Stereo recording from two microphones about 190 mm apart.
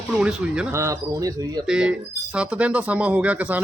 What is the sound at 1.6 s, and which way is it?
Speech, 5° right (ahead or behind).